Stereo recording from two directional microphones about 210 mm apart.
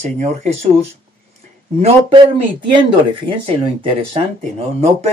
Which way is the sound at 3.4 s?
25° right (ahead or behind).